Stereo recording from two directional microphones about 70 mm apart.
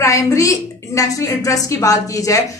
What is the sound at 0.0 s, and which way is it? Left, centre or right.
A woman's voice, left.